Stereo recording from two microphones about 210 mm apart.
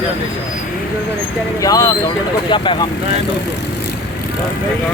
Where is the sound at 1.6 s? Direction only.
15° left (ahead or behind).